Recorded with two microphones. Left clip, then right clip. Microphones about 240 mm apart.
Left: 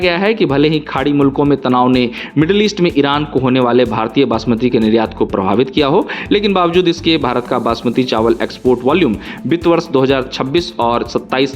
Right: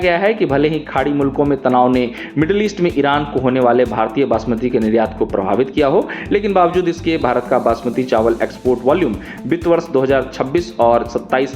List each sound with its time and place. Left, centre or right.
0.1 s speech: left